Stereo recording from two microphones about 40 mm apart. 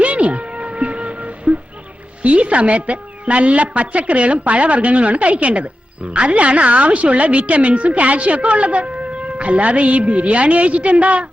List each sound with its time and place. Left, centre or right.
0.0 s music: right
2.2 s a woman's voice: right